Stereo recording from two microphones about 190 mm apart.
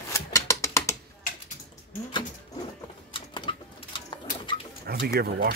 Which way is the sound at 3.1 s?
25° left (ahead or behind).